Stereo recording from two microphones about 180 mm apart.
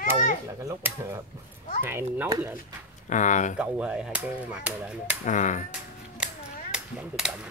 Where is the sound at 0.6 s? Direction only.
15° right (ahead or behind).